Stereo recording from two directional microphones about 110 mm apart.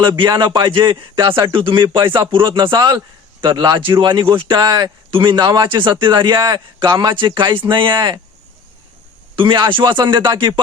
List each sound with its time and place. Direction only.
0.0 s speech: 45° right (ahead or behind)
9.3 s speech: 50° right (ahead or behind)